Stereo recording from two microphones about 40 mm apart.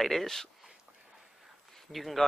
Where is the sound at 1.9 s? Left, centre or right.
Centre.